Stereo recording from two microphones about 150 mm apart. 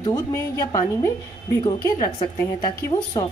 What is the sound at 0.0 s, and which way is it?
A woman's voice, 25° left (ahead or behind).